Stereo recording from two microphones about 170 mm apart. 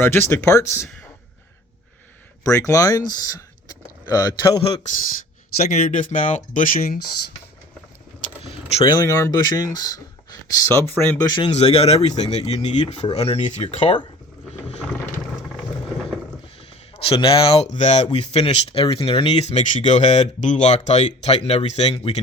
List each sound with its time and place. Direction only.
0.0 s speech: 15° left (ahead or behind)
2.4 s speech: 20° left (ahead or behind)
5.6 s speech: 45° left (ahead or behind)
8.8 s speech: 15° left (ahead or behind)
11.3 s speech: 30° left (ahead or behind)
17.0 s speech: 30° left (ahead or behind)